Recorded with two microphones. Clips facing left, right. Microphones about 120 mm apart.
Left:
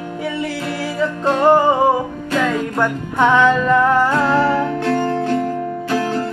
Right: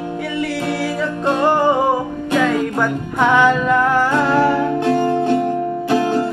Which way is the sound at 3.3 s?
5° right (ahead or behind).